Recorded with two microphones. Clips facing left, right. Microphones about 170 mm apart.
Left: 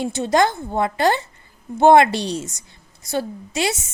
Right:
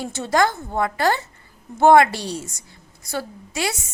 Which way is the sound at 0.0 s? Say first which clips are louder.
Left 2 dB; 20° left (ahead or behind).